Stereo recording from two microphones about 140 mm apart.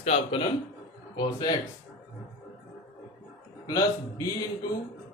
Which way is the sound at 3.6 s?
25° left (ahead or behind).